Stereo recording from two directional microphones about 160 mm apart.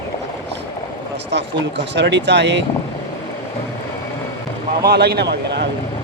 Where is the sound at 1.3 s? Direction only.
90° right.